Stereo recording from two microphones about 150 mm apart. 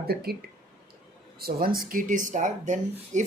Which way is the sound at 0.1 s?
90° right.